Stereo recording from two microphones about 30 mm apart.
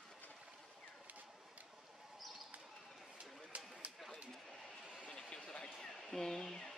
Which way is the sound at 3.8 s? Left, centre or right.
Right.